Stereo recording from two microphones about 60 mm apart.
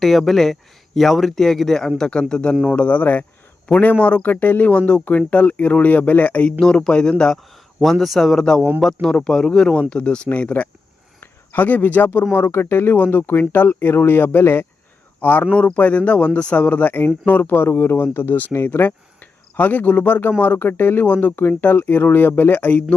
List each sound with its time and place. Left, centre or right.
0.0 s speech: centre; by 6.5 s left
6.6 s speech: centre
7.5 s a man's voice: centre; by 12.2 s left
12.2 s speech: left
21.1 s speech: left
21.3 s speech: left